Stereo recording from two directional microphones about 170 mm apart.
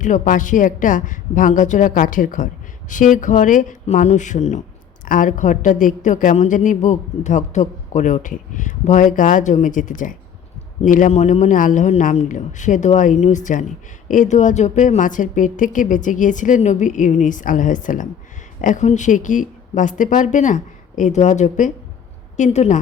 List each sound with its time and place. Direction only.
0.0 s a woman's voice: 50° left (ahead or behind)